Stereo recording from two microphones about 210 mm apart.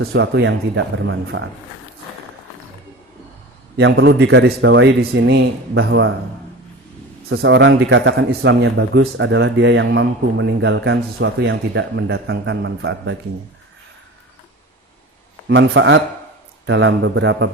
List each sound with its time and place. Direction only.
0.0 s speech: 50° right (ahead or behind)
3.8 s speech: 55° right (ahead or behind)
7.3 s speech: 55° right (ahead or behind)
15.4 s speech: 60° right (ahead or behind)